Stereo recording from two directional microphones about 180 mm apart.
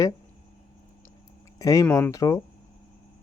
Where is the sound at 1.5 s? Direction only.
20° left (ahead or behind).